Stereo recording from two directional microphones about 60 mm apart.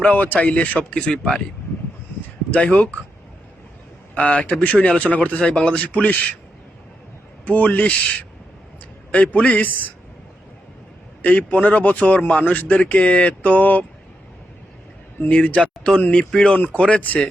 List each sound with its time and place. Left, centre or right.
0.0 s speech: left
2.5 s speech: left
4.1 s speech: left
7.4 s speech: left
9.1 s speech: left
11.2 s speech: left
15.2 s speech: left